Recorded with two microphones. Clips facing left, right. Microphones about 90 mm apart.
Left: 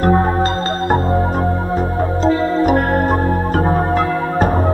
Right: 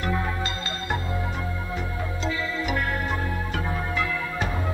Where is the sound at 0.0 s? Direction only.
45° left (ahead or behind).